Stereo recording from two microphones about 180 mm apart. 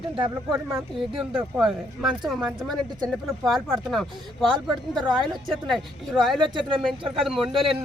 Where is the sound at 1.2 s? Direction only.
5° right (ahead or behind).